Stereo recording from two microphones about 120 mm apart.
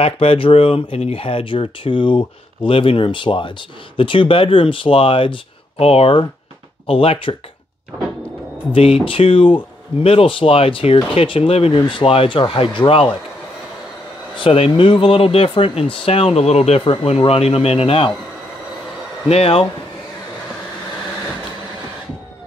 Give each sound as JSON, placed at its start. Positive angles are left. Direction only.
{"t": 0.0, "sound": "speech", "side_deg": 50}
{"t": 8.7, "sound": "speech", "side_deg": 50}
{"t": 14.3, "sound": "speech", "side_deg": 45}
{"t": 16.8, "sound": "speech", "side_deg": 50}
{"t": 19.2, "sound": "speech", "side_deg": 55}